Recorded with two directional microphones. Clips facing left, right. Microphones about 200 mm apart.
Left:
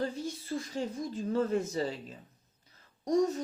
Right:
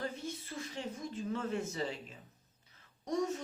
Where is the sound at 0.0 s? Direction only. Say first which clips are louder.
Left 6 dB; 35° left (ahead or behind).